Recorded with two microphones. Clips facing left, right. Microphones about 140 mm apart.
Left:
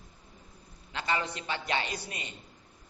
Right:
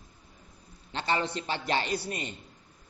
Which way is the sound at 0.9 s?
30° right (ahead or behind).